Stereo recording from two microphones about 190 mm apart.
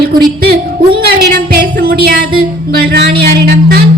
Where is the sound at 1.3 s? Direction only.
50° right (ahead or behind).